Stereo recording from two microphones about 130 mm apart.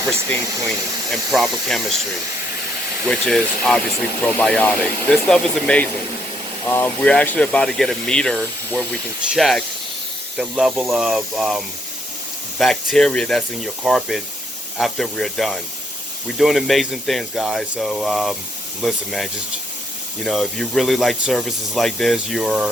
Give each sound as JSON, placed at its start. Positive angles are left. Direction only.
{"t": 0.3, "sound": "speech", "side_deg": 10}
{"t": 1.1, "sound": "speech", "side_deg": 0}
{"t": 3.1, "sound": "speech", "side_deg": 5}